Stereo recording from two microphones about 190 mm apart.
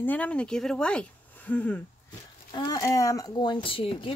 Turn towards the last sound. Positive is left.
turn(degrees=30)  # may be behind; listen again after turning